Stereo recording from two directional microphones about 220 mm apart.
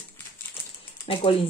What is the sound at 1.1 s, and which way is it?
Speech, 25° left (ahead or behind).